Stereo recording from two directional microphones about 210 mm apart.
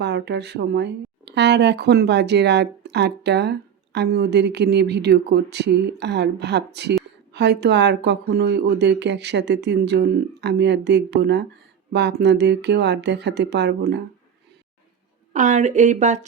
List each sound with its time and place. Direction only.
0.0 s speech: 55° right (ahead or behind)
15.3 s speech: 35° right (ahead or behind)